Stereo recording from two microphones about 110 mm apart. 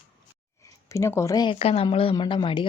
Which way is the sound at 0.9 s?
25° left (ahead or behind).